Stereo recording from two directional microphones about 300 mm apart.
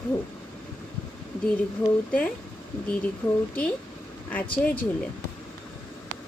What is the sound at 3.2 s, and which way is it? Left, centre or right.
Speech, centre.